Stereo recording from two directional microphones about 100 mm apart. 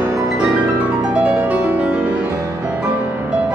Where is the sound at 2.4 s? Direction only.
30° right (ahead or behind).